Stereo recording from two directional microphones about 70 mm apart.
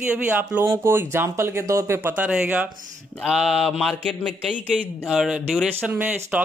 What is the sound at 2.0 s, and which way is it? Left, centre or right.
Speech, right.